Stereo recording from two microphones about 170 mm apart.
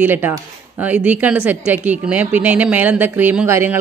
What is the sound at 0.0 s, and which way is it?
A woman's voice, 10° right (ahead or behind).